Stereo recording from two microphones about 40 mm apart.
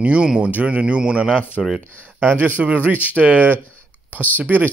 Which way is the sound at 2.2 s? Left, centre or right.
Right.